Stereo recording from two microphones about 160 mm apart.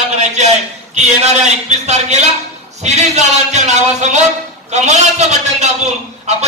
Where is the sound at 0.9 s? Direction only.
45° right (ahead or behind).